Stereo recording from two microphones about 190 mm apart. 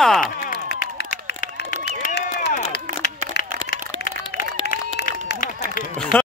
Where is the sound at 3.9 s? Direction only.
50° left (ahead or behind).